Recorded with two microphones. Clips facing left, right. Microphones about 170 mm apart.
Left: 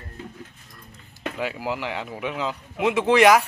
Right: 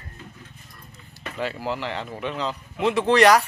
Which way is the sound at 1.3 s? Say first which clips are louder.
Right 1 dB; 10° left (ahead or behind).